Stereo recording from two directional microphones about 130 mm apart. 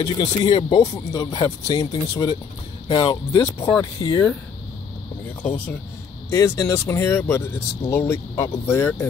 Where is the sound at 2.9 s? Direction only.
45° left (ahead or behind).